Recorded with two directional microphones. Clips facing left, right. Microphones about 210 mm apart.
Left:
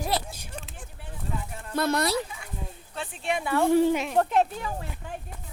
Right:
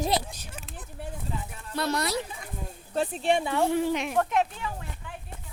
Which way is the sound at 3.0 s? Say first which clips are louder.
Right 6 dB; 35° right (ahead or behind).